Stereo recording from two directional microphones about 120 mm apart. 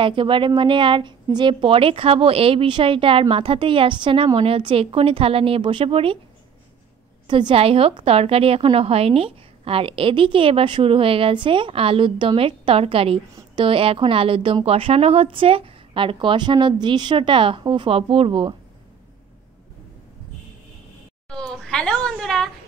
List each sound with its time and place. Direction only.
0.0 s a woman's voice: 45° right (ahead or behind)
7.2 s a woman's voice: 45° right (ahead or behind)
21.3 s a woman's voice: 5° left (ahead or behind)